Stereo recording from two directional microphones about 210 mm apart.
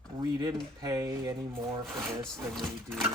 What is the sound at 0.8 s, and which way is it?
Speech, 15° right (ahead or behind).